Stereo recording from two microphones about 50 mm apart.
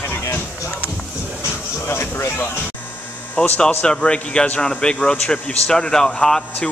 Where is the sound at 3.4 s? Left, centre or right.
Left.